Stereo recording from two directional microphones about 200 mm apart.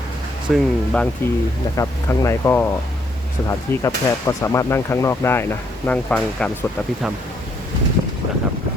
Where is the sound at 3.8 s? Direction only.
15° left (ahead or behind).